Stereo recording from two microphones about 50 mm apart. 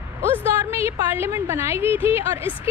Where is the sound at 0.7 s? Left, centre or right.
Right.